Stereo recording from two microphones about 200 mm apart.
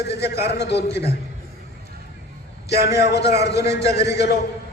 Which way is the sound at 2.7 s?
55° left (ahead or behind).